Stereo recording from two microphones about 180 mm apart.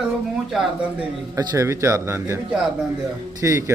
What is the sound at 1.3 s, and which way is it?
A man's voice, 15° right (ahead or behind).